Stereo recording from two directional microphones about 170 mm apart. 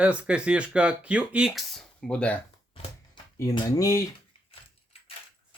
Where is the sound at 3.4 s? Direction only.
20° left (ahead or behind).